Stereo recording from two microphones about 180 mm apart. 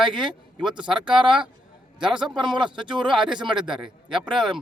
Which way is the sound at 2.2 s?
25° right (ahead or behind).